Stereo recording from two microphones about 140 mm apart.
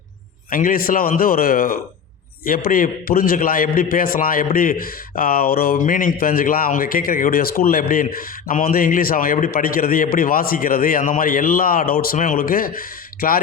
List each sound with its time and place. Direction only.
0.5 s speech: 85° left